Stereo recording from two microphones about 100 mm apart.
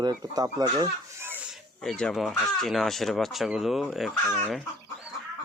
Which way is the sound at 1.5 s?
Centre (ahead or behind).